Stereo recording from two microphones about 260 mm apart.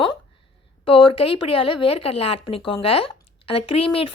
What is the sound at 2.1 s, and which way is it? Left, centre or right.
Speech, left.